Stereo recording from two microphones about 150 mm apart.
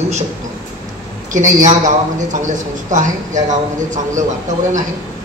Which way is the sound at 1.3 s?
55° right (ahead or behind).